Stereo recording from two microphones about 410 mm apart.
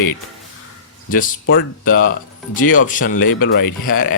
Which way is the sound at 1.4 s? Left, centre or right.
Left.